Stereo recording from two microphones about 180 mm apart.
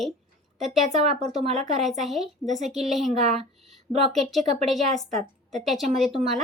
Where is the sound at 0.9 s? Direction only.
40° right (ahead or behind).